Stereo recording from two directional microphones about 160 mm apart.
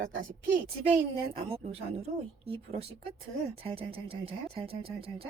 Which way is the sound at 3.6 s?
35° right (ahead or behind).